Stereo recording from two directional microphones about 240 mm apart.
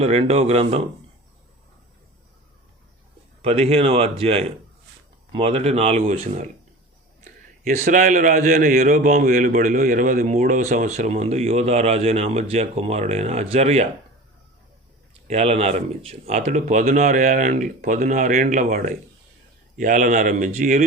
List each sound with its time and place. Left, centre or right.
0.0 s a man's voice: right
3.4 s a man's voice: right
7.6 s a man's voice: right
15.3 s speech: right